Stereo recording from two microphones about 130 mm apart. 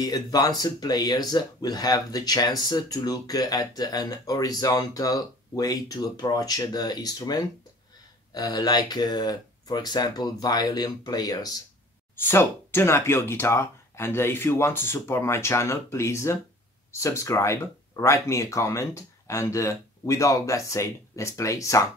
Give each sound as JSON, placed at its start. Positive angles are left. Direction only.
{"t": 0.0, "sound": "speech", "side_deg": 30}
{"t": 12.3, "sound": "speech", "side_deg": 20}